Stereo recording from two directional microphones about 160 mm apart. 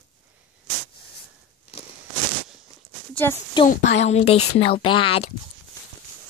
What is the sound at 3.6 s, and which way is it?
Speech, 45° left (ahead or behind).